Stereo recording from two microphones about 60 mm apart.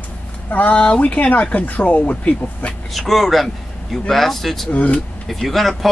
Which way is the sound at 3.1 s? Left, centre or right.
Centre.